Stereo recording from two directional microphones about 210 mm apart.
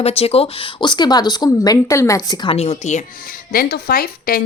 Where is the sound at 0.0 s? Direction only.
30° left (ahead or behind).